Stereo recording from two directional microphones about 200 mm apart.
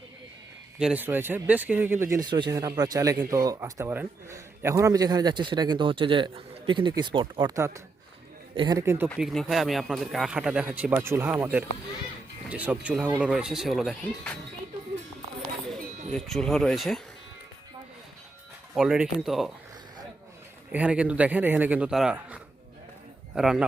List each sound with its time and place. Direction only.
0.8 s speech: 5° right (ahead or behind)
9.0 s speech: centre (ahead or behind)
16.1 s speech: centre (ahead or behind)
18.7 s speech: 5° right (ahead or behind)
20.7 s speech: 5° right (ahead or behind)